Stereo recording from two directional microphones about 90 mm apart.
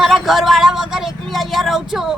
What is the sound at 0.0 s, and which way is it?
A woman's voice, 5° right (ahead or behind).